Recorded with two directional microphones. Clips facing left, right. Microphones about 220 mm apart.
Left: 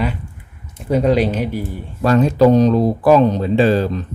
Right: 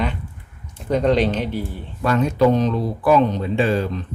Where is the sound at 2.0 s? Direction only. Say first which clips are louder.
Left 5 dB; 35° left (ahead or behind).